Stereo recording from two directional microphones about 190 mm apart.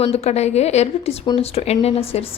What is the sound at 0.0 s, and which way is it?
Speech, 35° left (ahead or behind).